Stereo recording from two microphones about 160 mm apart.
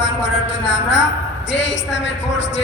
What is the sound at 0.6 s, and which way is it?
Speech, 90° left.